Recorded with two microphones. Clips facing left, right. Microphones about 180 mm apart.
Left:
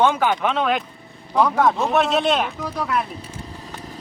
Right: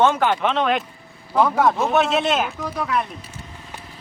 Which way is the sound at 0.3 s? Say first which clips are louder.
Even; centre (ahead or behind).